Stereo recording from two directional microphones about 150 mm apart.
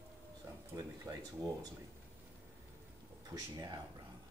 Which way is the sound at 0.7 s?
25° right (ahead or behind).